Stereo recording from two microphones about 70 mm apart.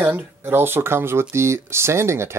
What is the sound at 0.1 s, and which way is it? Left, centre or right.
Speech, right.